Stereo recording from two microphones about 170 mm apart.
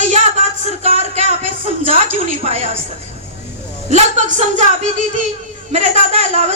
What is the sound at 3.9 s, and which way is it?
A man's voice, 45° right (ahead or behind).